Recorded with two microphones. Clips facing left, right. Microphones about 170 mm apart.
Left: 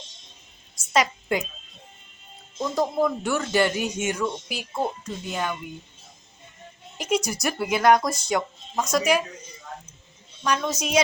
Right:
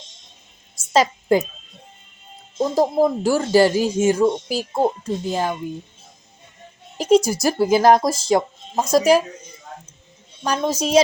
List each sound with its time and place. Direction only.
0.9 s a woman's voice: 30° right (ahead or behind)
2.6 s speech: 35° right (ahead or behind)
6.9 s a woman's voice: 35° right (ahead or behind)
10.4 s speech: 35° right (ahead or behind)